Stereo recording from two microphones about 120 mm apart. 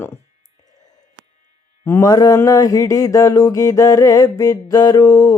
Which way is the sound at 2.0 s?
30° left (ahead or behind).